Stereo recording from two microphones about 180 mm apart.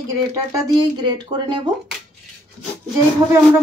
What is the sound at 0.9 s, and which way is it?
Speech, 25° right (ahead or behind).